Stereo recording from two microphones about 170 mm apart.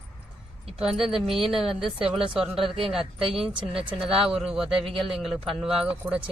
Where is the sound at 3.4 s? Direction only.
30° right (ahead or behind).